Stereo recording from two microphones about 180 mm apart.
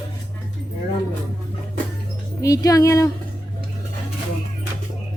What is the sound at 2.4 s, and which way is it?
Speech, 20° left (ahead or behind).